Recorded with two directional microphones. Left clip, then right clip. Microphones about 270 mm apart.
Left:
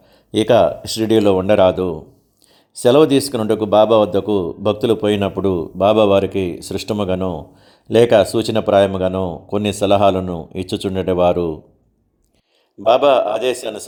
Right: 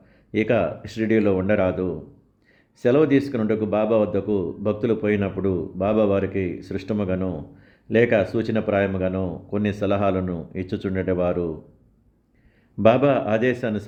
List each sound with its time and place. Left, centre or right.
0.3 s speech: centre
12.9 s speech: centre